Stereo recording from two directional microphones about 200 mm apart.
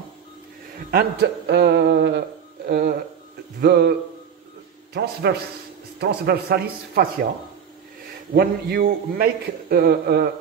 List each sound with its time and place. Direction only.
0.9 s speech: 55° right (ahead or behind)
4.9 s a man's voice: 55° right (ahead or behind)
8.4 s a man's voice: 50° right (ahead or behind)